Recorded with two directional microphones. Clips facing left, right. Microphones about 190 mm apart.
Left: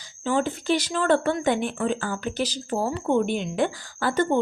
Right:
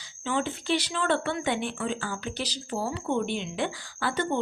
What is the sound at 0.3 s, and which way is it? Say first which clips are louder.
Speech: left 4 dB; 45° left (ahead or behind).